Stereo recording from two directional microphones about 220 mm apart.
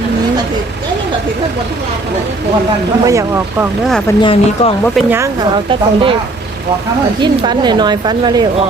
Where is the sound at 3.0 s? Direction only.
15° right (ahead or behind).